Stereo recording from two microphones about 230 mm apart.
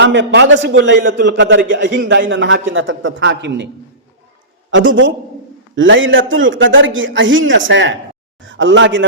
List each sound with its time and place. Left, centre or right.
0.0 s a man's voice: right
4.7 s a man's voice: right